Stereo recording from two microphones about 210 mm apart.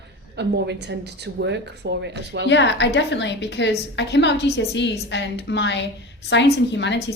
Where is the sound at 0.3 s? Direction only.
55° right (ahead or behind).